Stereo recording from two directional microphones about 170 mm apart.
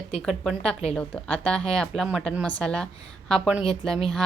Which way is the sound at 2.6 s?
5° left (ahead or behind).